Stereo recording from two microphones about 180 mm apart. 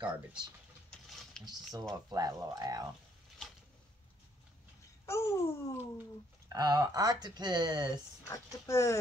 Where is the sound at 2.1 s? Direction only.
20° right (ahead or behind).